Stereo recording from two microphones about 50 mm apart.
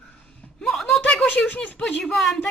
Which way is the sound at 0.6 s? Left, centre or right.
Centre.